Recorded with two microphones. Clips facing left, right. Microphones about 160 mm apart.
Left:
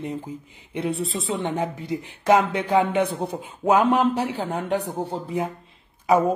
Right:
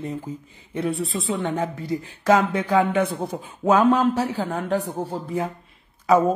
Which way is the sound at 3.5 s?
20° left (ahead or behind).